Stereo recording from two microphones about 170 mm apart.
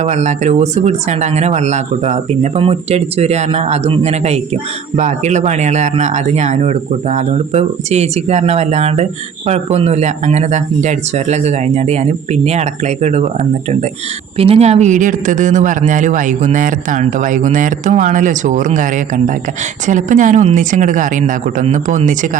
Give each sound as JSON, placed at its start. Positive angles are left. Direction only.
{"t": 0.0, "sound": "speech", "side_deg": -45}
{"t": 14.3, "sound": "speech", "side_deg": -35}